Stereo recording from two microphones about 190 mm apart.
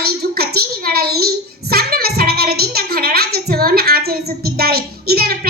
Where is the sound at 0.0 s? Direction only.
55° right (ahead or behind).